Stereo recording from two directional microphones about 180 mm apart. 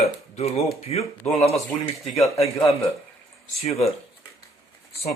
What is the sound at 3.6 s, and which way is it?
Speech, 35° left (ahead or behind).